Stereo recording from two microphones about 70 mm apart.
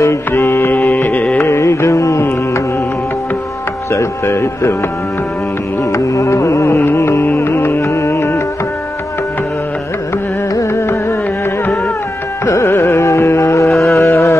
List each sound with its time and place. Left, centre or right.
0.3 s music: left
1.4 s music: left
3.9 s speech: left
5.9 s carnatic music: left
7.2 s music: left
12.6 s carnatic music: left
13.9 s a sound: left